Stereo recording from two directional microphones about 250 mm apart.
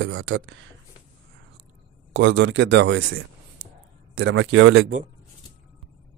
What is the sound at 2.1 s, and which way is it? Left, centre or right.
Speech, right.